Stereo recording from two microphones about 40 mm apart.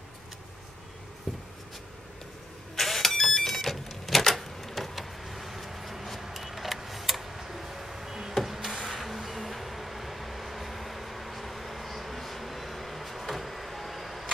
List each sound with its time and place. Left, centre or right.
1.3 s writing: centre
2.7 s vehicle: centre
8.5 s a sound: centre